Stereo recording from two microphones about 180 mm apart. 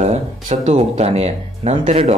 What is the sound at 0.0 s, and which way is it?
Speech, 40° right (ahead or behind).